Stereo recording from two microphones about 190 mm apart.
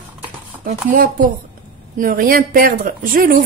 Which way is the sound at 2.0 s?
45° right (ahead or behind).